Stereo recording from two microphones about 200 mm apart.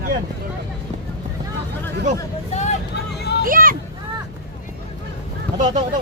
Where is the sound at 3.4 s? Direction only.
45° right (ahead or behind).